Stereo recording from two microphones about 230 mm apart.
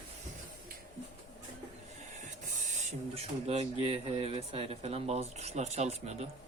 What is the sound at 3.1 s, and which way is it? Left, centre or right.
Speech, right.